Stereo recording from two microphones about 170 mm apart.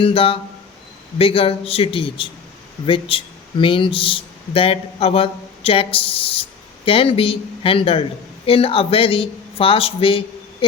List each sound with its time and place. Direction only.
0.0 s speech: 35° left (ahead or behind)